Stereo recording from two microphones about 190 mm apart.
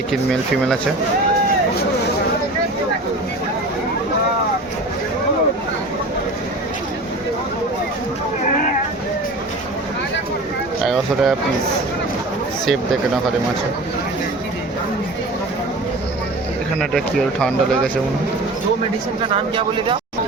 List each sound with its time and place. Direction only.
0.1 s speech: centre (ahead or behind)
10.8 s speech: 5° right (ahead or behind)
16.9 s speech: 5° left (ahead or behind)
19.5 s speech: 25° right (ahead or behind)